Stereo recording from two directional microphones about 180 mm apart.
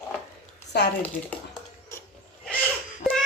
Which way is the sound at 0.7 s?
65° left (ahead or behind).